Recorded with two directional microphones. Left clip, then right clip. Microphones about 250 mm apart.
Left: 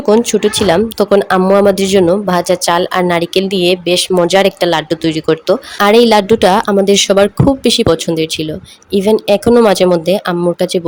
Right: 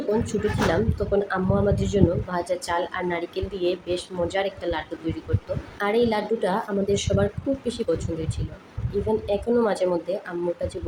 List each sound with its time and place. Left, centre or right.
0.3 s speech: left
5.8 s speech: left